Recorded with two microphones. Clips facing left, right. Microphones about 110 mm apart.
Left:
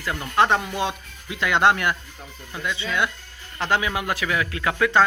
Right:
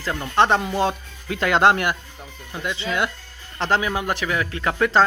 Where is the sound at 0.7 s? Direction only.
40° right (ahead or behind).